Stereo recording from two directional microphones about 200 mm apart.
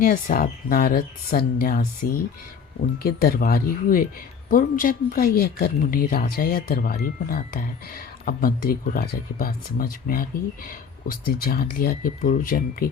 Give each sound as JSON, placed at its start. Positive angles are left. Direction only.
{"t": 0.0, "sound": "speech", "side_deg": 45}
{"t": 3.0, "sound": "speech", "side_deg": 50}